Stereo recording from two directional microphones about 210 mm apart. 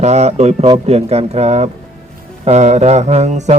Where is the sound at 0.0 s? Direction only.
30° right (ahead or behind).